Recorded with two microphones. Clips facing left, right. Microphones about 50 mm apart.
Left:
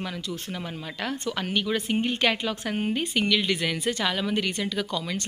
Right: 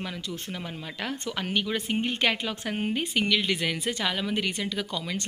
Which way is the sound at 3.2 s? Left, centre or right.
Right.